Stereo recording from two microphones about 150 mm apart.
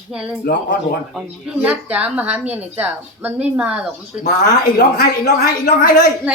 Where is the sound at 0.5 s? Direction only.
90° left.